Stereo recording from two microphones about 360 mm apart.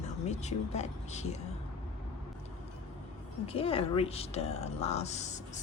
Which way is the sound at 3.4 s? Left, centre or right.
Centre.